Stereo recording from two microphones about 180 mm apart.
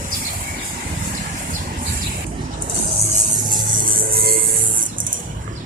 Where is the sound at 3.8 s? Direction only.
55° right (ahead or behind).